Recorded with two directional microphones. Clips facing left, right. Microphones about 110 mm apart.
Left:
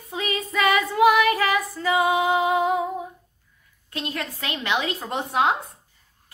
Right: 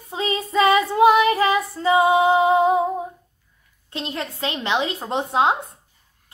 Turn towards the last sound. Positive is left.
turn(degrees=-25)  # may be behind; listen again after turning